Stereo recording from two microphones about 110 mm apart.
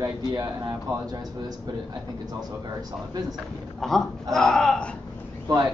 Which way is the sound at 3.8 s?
5° left (ahead or behind).